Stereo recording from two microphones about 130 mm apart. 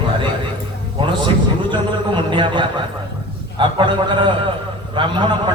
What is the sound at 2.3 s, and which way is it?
A man's voice, 40° right (ahead or behind).